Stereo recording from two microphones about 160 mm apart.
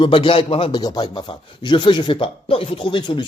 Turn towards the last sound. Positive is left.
turn(degrees=30)  # may be behind; listen again after turning